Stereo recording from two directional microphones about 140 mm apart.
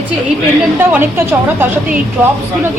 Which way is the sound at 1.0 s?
15° right (ahead or behind).